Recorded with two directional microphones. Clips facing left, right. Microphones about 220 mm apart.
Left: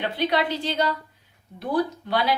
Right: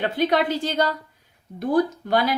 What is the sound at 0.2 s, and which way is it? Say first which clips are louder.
A woman's voice: right 3 dB; 45° right (ahead or behind).